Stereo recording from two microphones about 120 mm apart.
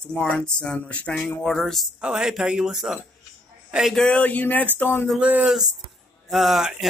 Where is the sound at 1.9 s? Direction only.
10° right (ahead or behind); by 5.0 s 15° left (ahead or behind).